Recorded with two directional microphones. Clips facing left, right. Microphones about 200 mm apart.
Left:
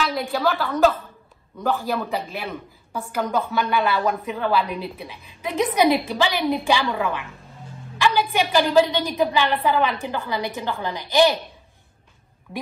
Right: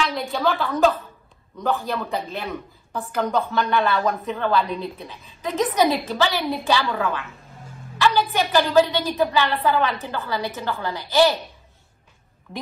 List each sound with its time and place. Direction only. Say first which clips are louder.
0.0 s a woman's voice: even; centre (ahead or behind)
12.5 s speech: left 1 dB; 5° left (ahead or behind)